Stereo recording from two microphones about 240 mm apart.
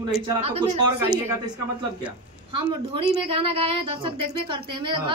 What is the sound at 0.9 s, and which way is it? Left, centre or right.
Speech, centre.